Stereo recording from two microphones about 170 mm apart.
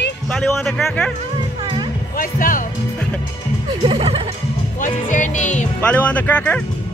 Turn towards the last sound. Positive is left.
turn(degrees=10)  # may be behind; listen again after turning